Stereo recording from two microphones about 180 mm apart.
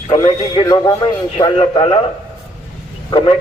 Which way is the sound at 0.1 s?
25° left (ahead or behind).